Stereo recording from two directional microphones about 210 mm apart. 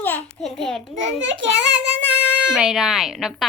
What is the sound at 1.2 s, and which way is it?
A child's voice, 60° right (ahead or behind).